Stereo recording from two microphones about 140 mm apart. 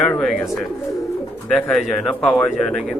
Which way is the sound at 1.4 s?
5° left (ahead or behind).